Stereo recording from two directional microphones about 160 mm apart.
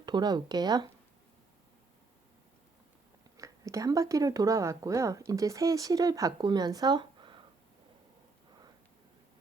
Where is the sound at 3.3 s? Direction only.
20° right (ahead or behind).